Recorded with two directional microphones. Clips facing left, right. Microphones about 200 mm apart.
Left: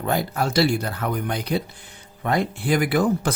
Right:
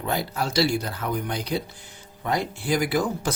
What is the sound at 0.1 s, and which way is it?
Speech, 50° left (ahead or behind).